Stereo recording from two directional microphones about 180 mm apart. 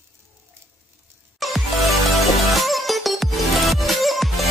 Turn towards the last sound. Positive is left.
turn(degrees=0)  # may be behind; listen again after turning